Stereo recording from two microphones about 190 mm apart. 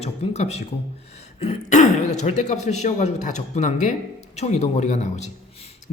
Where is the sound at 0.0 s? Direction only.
35° left (ahead or behind).